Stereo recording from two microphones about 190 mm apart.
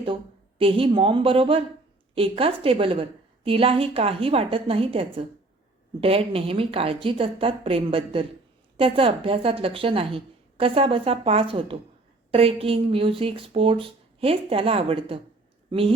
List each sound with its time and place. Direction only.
0.6 s a woman's voice: 30° right (ahead or behind)